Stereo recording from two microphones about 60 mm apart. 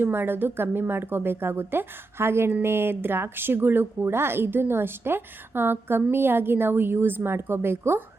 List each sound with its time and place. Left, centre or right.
0.0 s speech: right